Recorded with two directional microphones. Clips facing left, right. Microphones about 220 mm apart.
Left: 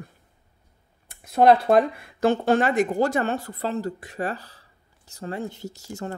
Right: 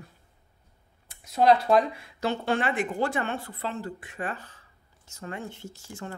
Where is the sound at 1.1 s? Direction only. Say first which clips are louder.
Left 4 dB; 55° left (ahead or behind).